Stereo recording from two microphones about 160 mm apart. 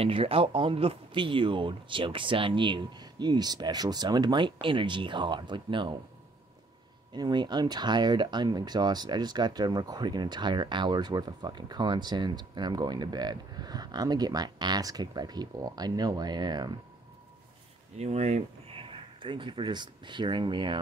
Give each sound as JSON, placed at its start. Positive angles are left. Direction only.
{"t": 0.0, "sound": "speech", "side_deg": -35}
{"t": 7.2, "sound": "speech", "side_deg": -25}
{"t": 17.9, "sound": "speech", "side_deg": -40}